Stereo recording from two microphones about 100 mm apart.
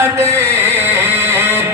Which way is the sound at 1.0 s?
25° right (ahead or behind).